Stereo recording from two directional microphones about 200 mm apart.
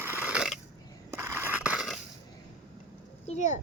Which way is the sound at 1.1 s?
10° right (ahead or behind).